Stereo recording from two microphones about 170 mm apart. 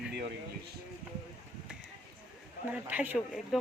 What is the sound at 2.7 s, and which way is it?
Speech, 10° right (ahead or behind).